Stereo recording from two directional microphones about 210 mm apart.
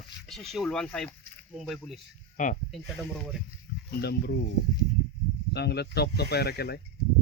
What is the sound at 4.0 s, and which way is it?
Speech, 50° left (ahead or behind).